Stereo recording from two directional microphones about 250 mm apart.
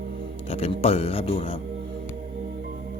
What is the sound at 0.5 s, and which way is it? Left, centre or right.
Speech, left.